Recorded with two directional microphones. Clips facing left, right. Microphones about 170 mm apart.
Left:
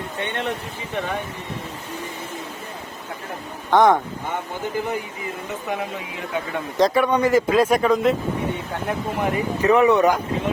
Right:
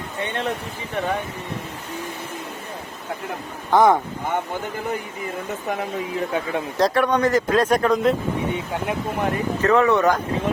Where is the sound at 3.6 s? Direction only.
5° right (ahead or behind).